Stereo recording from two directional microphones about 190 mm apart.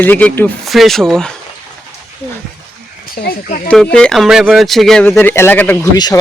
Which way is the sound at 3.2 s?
50° left (ahead or behind).